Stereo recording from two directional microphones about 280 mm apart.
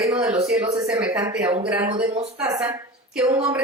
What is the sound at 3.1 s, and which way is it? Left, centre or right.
Speech, centre.